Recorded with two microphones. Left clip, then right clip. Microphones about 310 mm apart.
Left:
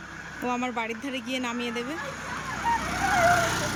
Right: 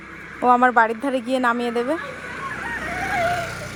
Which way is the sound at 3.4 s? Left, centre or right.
Left.